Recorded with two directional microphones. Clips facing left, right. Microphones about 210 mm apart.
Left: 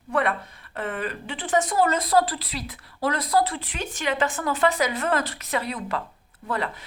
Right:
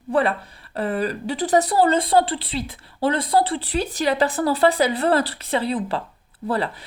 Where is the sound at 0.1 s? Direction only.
30° right (ahead or behind).